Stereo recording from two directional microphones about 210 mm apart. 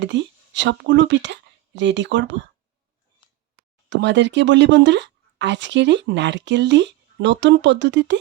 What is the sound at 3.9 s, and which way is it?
Speech, 60° right (ahead or behind).